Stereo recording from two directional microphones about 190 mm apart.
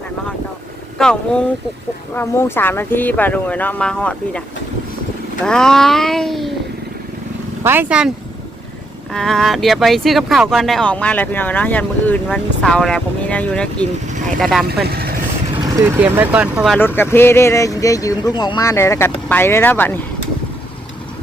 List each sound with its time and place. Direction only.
0.9 s speech: 5° left (ahead or behind)
5.5 s speech: 5° left (ahead or behind)
7.6 s speech: 10° right (ahead or behind)
9.1 s speech: centre (ahead or behind)
14.8 s vehicle: 55° right (ahead or behind)
16.0 s speech: 10° right (ahead or behind)
16.7 s speech: 10° left (ahead or behind)